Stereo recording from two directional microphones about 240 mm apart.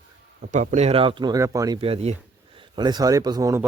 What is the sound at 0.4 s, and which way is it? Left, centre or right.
Speech, right.